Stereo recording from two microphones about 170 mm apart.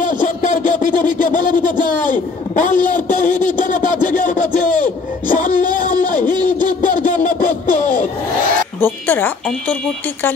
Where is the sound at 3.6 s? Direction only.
50° left (ahead or behind).